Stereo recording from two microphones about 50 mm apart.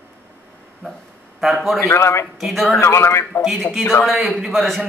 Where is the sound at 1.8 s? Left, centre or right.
Left.